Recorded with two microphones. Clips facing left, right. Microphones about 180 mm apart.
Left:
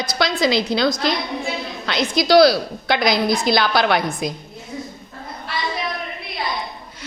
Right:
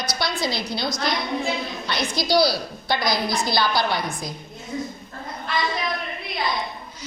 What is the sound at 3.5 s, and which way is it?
Speech, 75° left (ahead or behind).